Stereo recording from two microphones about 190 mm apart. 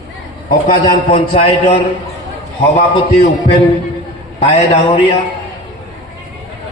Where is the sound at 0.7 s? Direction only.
30° left (ahead or behind).